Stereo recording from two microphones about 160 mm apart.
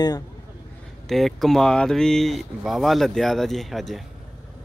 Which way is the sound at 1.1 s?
Centre (ahead or behind).